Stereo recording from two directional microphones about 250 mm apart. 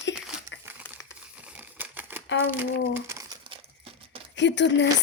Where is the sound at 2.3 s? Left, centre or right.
Left.